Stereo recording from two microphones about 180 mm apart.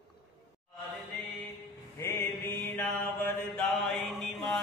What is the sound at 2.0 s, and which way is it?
Mantra, 15° left (ahead or behind).